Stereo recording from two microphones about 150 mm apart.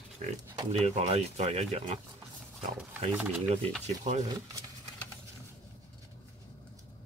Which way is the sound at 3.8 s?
45° right (ahead or behind).